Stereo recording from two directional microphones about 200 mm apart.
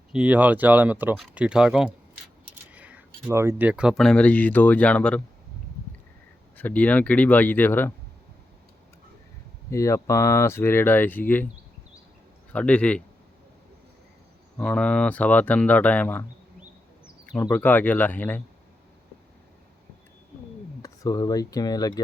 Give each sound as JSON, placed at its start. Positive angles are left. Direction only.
{"t": 0.1, "sound": "speech", "side_deg": -5}
{"t": 6.6, "sound": "speech", "side_deg": 10}
{"t": 9.6, "sound": "speech", "side_deg": 15}
{"t": 12.5, "sound": "a man's voice", "side_deg": 5}
{"t": 14.6, "sound": "speech", "side_deg": 5}
{"t": 17.5, "sound": "speech", "side_deg": 10}
{"t": 20.8, "sound": "speech", "side_deg": 20}